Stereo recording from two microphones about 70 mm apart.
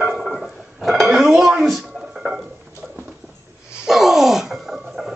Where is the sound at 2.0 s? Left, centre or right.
Centre.